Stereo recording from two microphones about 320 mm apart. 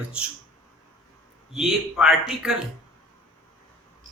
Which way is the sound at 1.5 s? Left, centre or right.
Centre.